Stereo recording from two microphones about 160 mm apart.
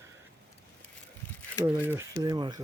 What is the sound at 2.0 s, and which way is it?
Speech, 20° right (ahead or behind).